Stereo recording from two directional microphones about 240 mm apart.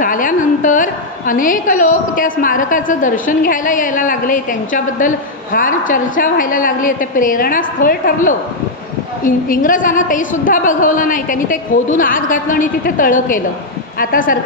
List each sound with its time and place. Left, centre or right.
0.0 s a woman's voice: left